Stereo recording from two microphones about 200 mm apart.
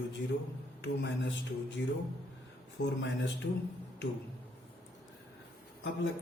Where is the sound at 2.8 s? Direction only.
60° left (ahead or behind).